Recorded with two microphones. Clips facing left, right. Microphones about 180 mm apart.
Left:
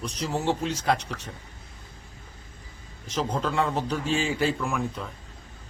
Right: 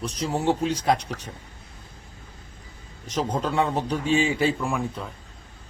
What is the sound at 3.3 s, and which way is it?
Speech, 35° right (ahead or behind).